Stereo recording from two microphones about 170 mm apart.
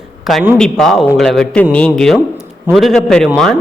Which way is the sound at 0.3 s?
Centre (ahead or behind).